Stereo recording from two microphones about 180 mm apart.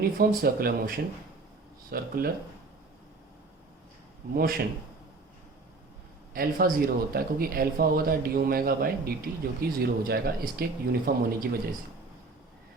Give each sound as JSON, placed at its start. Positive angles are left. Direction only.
{"t": 0.0, "sound": "speech", "side_deg": -55}
{"t": 4.4, "sound": "speech", "side_deg": -55}
{"t": 6.3, "sound": "speech", "side_deg": -55}